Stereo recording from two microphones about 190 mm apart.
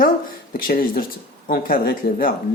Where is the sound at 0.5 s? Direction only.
50° left (ahead or behind).